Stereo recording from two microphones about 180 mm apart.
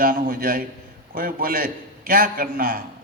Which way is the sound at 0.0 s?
55° right (ahead or behind).